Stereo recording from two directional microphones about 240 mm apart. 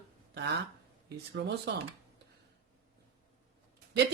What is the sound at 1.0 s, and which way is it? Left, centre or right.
Speech, right.